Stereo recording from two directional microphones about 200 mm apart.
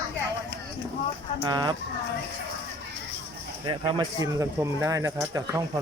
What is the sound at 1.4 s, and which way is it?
Speech, 20° right (ahead or behind).